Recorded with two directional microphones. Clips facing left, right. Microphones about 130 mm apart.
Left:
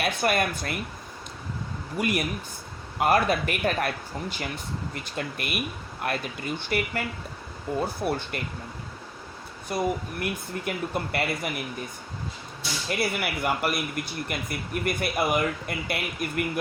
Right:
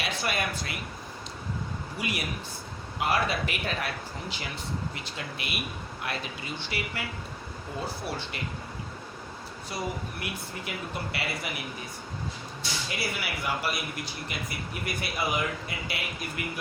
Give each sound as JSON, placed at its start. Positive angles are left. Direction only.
{"t": 0.0, "sound": "speech", "side_deg": 50}
{"t": 2.0, "sound": "speech", "side_deg": 50}
{"t": 9.6, "sound": "speech", "side_deg": 50}
{"t": 13.0, "sound": "speech", "side_deg": 55}